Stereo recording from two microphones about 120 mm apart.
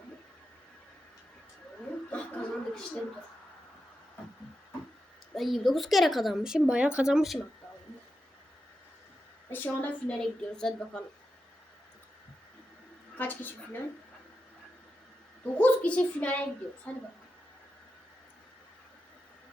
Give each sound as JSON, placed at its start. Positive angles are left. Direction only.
{"t": 2.0, "sound": "chuckle", "side_deg": 10}
{"t": 5.3, "sound": "speech", "side_deg": 0}
{"t": 9.5, "sound": "a woman's voice", "side_deg": 15}
{"t": 13.1, "sound": "a woman's voice", "side_deg": 15}
{"t": 15.5, "sound": "a woman's voice", "side_deg": 10}